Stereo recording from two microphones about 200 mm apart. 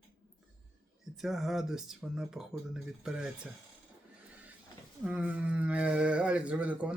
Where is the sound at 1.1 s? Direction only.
Centre (ahead or behind).